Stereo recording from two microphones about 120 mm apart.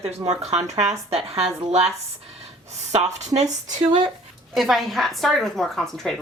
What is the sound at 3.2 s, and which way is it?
Speech, 70° right (ahead or behind).